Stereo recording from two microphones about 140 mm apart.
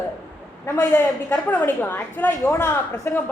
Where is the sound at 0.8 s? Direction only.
25° left (ahead or behind).